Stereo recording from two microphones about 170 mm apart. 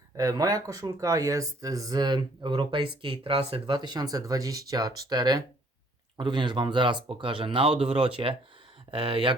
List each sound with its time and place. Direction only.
0.2 s speech: 20° right (ahead or behind)